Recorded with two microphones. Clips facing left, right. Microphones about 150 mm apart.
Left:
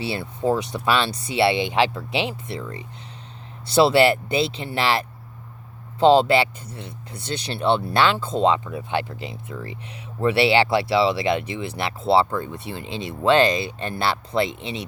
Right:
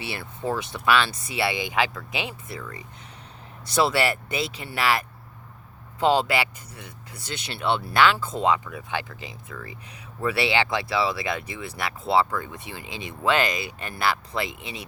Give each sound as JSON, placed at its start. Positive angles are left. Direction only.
{"t": 0.0, "sound": "speech", "side_deg": 30}